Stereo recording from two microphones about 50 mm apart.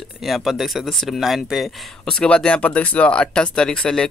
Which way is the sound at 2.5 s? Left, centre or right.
Left.